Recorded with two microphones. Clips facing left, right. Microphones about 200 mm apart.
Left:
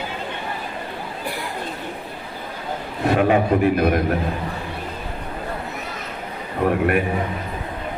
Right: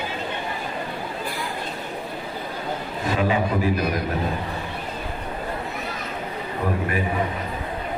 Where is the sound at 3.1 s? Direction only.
60° left (ahead or behind).